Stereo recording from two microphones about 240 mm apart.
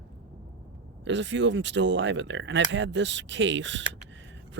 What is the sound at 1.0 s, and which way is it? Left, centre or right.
Speech, right.